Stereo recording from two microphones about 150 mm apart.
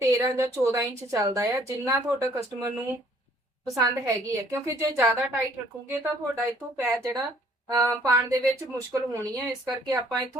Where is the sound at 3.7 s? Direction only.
20° right (ahead or behind).